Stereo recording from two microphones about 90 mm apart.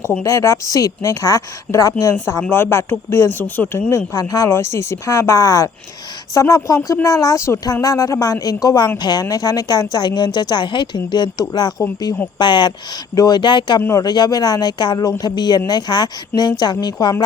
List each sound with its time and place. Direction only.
0.2 s a woman's voice: 35° left (ahead or behind)
12.4 s a woman's voice: 55° left (ahead or behind)